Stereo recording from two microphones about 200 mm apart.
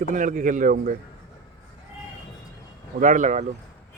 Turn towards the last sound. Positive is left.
turn(degrees=-40)  # may be behind; listen again after turning